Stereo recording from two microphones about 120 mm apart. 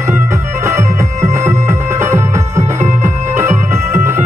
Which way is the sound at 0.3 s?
25° right (ahead or behind).